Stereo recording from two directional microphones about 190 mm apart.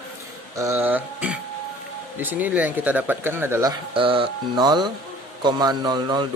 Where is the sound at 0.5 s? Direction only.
15° right (ahead or behind).